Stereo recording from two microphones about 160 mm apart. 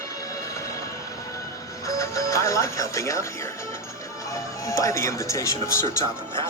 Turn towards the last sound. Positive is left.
turn(degrees=20)  # may be behind; listen again after turning